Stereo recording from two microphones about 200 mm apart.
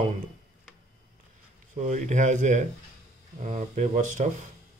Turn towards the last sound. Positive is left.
turn(degrees=-40)  # may be behind; listen again after turning